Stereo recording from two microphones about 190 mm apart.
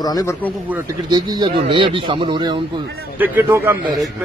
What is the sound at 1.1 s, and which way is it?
Speech, 25° right (ahead or behind).